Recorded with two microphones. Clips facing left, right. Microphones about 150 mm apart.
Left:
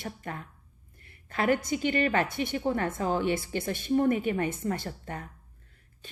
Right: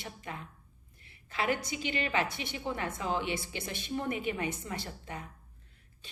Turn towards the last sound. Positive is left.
turn(degrees=50)  # may be behind; listen again after turning